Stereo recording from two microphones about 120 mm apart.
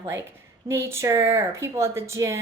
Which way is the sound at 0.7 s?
20° right (ahead or behind).